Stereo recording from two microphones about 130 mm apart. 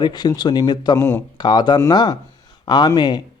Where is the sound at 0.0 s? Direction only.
30° left (ahead or behind).